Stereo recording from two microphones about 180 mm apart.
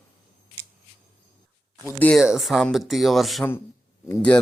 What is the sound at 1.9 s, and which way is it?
Speech, 10° left (ahead or behind).